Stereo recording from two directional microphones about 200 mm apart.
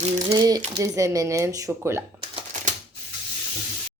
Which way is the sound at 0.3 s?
20° right (ahead or behind).